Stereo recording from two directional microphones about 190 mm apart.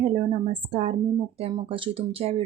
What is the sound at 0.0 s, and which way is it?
Speech, 30° right (ahead or behind).